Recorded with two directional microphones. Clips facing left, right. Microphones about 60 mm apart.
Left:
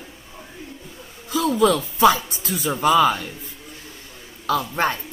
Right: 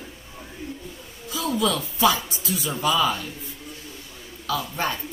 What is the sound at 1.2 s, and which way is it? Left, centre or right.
Speech, left.